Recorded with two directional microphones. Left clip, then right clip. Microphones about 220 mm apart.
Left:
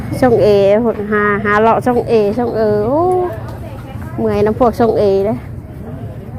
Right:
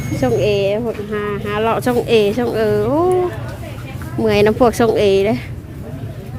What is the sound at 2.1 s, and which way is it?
A woman's voice, 25° right (ahead or behind).